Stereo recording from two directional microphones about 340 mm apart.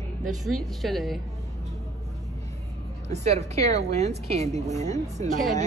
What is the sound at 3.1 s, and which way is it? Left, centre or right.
A woman's voice, centre.